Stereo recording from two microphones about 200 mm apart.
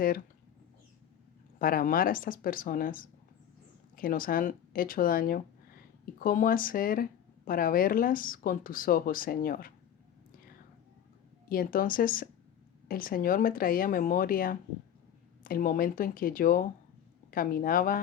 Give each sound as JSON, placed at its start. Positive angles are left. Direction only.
{"t": 1.5, "sound": "speech", "side_deg": 45}
{"t": 11.4, "sound": "speech", "side_deg": 45}